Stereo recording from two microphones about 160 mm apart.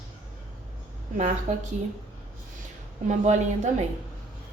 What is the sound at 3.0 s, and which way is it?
Speech, 50° right (ahead or behind).